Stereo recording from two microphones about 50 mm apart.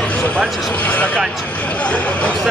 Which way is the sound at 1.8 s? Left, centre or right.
Left.